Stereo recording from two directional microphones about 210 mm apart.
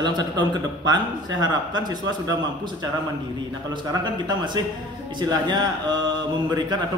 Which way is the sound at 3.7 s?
20° right (ahead or behind).